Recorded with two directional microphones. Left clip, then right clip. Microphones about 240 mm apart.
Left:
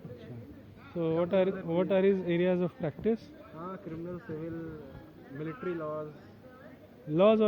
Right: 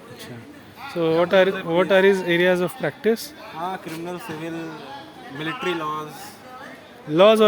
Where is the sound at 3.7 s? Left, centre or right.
Right.